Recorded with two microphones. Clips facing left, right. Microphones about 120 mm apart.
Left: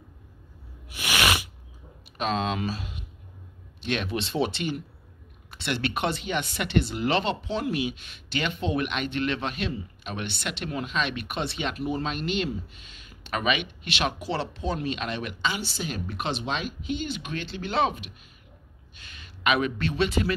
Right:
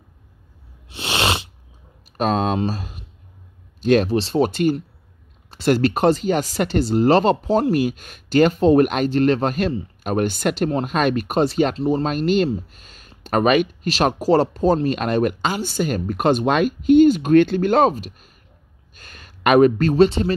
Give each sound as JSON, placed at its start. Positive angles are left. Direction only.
{"t": 0.8, "sound": "a sound", "side_deg": -25}
{"t": 2.1, "sound": "speech", "side_deg": -45}
{"t": 11.7, "sound": "speech", "side_deg": -30}
{"t": 12.0, "sound": "speech", "side_deg": -45}